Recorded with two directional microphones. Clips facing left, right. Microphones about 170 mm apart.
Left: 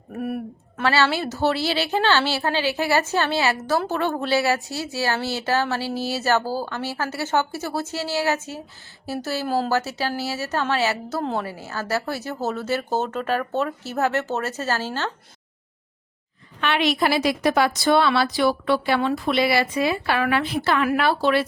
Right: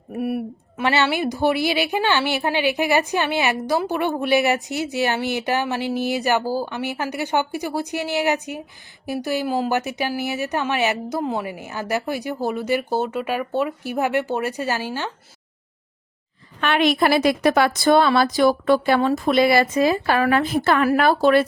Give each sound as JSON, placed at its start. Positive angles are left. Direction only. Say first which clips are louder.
{"t": 0.1, "sound": "a sound", "louder": "right 3 dB", "side_deg": -10}
{"t": 0.9, "sound": "a woman's voice", "louder": "right 1 dB", "side_deg": -15}
{"t": 16.6, "sound": "a woman's voice", "louder": "right 3 dB", "side_deg": -50}